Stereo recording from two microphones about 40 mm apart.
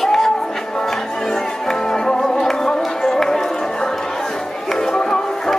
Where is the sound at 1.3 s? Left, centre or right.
Centre.